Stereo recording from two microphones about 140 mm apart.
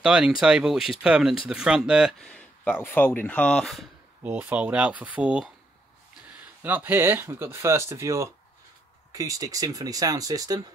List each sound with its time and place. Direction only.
0.0 s speech: 5° right (ahead or behind)
4.2 s speech: 10° right (ahead or behind)
6.6 s speech: 15° right (ahead or behind)